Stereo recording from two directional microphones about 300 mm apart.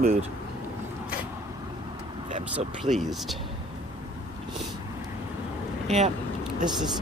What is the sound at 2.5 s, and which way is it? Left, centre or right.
Speech, centre.